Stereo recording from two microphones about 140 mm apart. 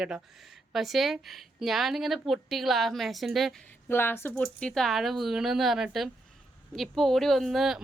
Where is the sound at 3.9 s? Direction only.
15° left (ahead or behind).